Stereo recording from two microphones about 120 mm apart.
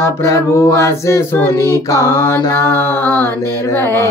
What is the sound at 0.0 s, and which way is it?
Mantra, 25° left (ahead or behind).